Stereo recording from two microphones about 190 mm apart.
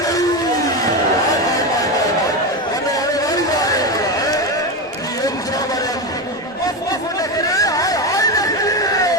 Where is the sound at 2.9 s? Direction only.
20° left (ahead or behind).